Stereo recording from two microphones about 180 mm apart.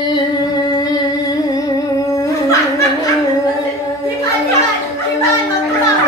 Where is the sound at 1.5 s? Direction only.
20° left (ahead or behind).